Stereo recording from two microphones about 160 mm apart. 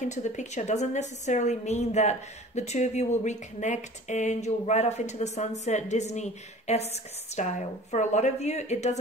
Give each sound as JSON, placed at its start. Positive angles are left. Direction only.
{"t": 0.0, "sound": "a woman's voice", "side_deg": 50}